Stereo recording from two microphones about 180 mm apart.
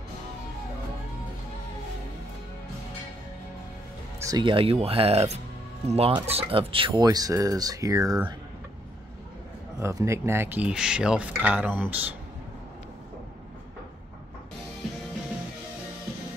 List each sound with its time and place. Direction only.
4.2 s speech: 25° right (ahead or behind)
9.8 s speech: 15° right (ahead or behind)